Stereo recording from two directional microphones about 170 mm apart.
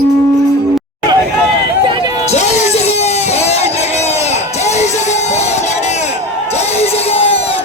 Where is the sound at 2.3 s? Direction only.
45° left (ahead or behind).